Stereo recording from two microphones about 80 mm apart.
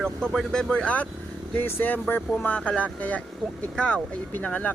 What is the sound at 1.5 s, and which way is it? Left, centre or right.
Speech, left.